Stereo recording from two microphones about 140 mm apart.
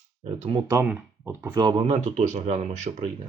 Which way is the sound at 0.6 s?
25° right (ahead or behind).